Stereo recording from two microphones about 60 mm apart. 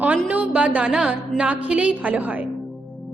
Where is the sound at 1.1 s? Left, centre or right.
Right.